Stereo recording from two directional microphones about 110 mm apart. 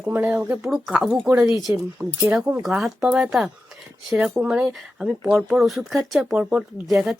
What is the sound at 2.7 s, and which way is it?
Speech, 5° right (ahead or behind).